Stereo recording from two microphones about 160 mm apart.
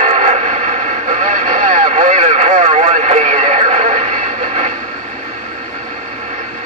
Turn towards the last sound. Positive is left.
turn(degrees=-50)  # may be behind; listen again after turning